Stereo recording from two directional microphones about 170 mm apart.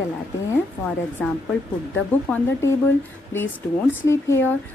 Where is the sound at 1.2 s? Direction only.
10° left (ahead or behind).